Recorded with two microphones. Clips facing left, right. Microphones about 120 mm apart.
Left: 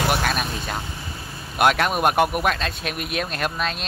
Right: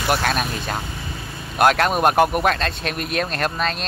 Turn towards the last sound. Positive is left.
turn(degrees=5)  # may be behind; listen again after turning